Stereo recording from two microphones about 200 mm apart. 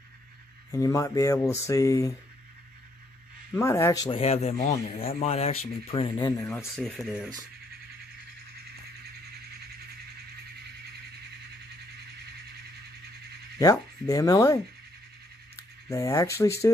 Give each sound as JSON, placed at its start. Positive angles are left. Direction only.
{"t": 0.7, "sound": "rub", "side_deg": 15}
{"t": 3.5, "sound": "rub", "side_deg": 15}
{"t": 4.2, "sound": "speech", "side_deg": 30}
{"t": 6.7, "sound": "speech", "side_deg": 0}
{"t": 13.6, "sound": "rub", "side_deg": 15}
{"t": 15.9, "sound": "rub", "side_deg": 15}